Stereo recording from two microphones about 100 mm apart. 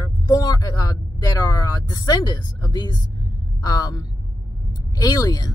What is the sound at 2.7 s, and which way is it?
Speech, 45° left (ahead or behind).